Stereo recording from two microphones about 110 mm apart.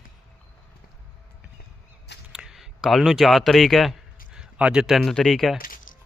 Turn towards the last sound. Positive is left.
turn(degrees=5)  # may be behind; listen again after turning